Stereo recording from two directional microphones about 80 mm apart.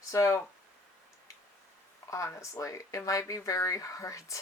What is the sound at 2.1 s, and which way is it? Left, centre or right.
Speech, left.